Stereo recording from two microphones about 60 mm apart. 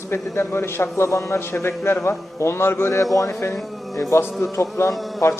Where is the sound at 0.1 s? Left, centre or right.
Left.